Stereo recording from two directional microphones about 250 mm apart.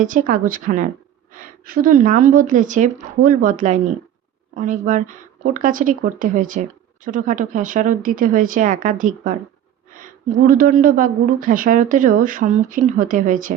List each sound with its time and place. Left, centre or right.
0.0 s a woman's voice: right